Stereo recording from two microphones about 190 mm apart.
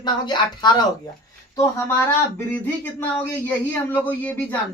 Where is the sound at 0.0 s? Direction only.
25° left (ahead or behind).